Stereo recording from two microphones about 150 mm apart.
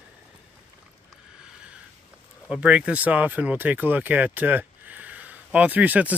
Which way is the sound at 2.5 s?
10° right (ahead or behind).